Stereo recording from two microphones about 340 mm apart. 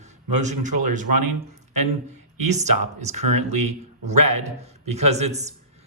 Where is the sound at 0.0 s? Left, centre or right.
Right.